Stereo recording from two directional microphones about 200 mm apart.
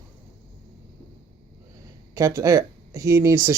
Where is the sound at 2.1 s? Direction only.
15° right (ahead or behind).